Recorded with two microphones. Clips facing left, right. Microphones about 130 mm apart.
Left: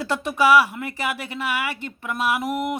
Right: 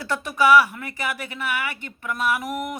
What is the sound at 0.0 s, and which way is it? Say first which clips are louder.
Speech: left 1 dB; 25° left (ahead or behind).